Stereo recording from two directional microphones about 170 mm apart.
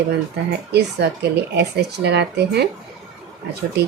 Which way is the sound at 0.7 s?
80° right.